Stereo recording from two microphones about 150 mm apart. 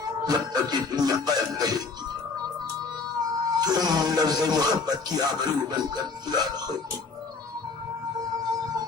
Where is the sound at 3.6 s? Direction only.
25° right (ahead or behind).